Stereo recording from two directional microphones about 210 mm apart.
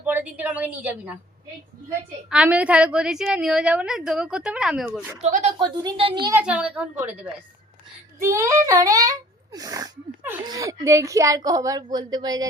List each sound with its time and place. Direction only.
0.0 s a woman's voice: 10° right (ahead or behind)
2.3 s a woman's voice: 5° right (ahead or behind)
5.2 s speech: 30° right (ahead or behind)
6.3 s a child's voice: 5° right (ahead or behind)
8.2 s a child's voice: 15° right (ahead or behind)